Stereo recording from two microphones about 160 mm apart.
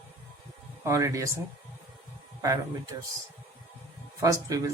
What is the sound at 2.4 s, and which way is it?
Speech, 20° right (ahead or behind).